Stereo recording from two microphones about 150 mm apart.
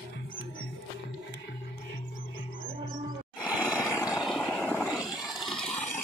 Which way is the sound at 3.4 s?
10° left (ahead or behind).